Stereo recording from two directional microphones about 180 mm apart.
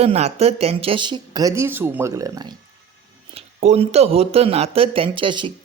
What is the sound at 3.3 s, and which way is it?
Speech, 35° right (ahead or behind).